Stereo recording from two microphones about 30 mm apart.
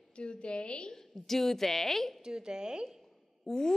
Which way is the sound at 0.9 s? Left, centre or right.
Centre.